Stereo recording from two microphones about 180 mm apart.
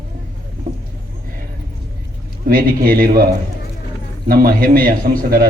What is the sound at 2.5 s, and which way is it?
Speech, 55° right (ahead or behind).